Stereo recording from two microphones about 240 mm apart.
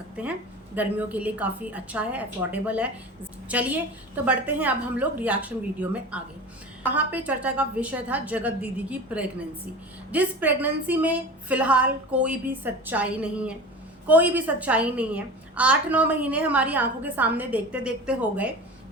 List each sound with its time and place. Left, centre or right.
0.8 s a woman's voice: centre